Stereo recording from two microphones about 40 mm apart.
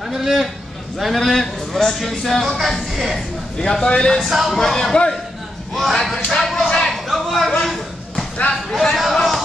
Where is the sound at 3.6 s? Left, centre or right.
Centre.